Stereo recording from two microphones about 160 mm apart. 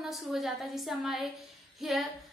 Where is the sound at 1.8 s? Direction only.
Centre (ahead or behind).